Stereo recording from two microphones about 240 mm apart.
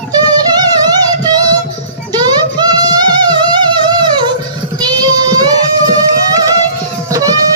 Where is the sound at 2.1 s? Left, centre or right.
Centre.